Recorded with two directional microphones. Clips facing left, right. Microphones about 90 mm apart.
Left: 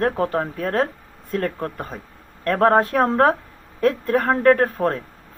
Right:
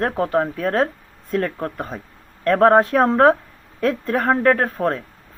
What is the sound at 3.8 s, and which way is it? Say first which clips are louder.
Speech: left 1 dB; 35° left (ahead or behind).